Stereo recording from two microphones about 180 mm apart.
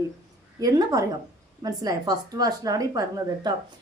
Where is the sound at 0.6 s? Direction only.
20° right (ahead or behind).